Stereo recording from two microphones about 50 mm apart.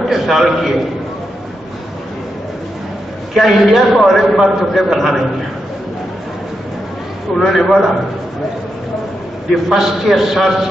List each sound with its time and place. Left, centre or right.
0.1 s a man's voice: centre
3.3 s a man's voice: centre
7.3 s a man's voice: centre
9.5 s a man's voice: centre